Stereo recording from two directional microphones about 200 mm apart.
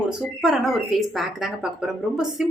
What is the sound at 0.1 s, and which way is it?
A woman's voice, centre (ahead or behind).